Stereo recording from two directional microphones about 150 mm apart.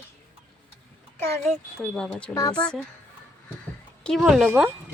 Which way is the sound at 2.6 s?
10° left (ahead or behind).